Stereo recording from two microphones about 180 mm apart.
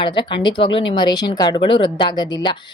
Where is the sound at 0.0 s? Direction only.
25° left (ahead or behind).